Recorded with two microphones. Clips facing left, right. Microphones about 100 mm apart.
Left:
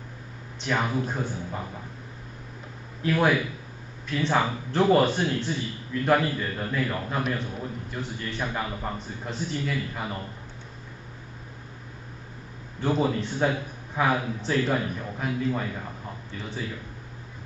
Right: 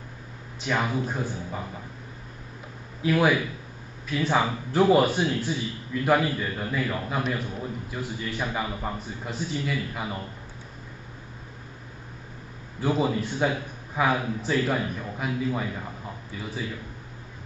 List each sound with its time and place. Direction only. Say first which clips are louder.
0.6 s a man's voice: even; 5° right (ahead or behind)
3.0 s a man's voice: right 1 dB; 5° right (ahead or behind)
12.8 s a man's voice: even; 5° right (ahead or behind)